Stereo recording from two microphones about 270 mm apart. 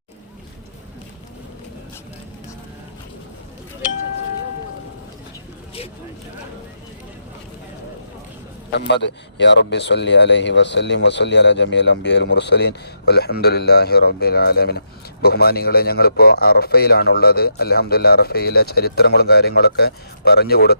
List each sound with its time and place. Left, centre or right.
9.4 s speech: left